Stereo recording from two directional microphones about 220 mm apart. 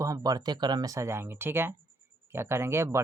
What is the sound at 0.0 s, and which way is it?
Speech, 15° right (ahead or behind).